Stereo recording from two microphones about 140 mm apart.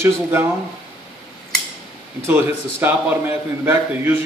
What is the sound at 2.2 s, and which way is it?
Speech, 15° right (ahead or behind).